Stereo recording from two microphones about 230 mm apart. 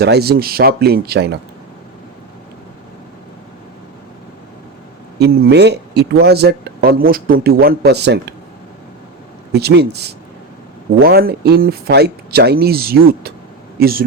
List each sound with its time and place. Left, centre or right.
0.0 s speech: right
5.2 s speech: right
9.5 s speech: right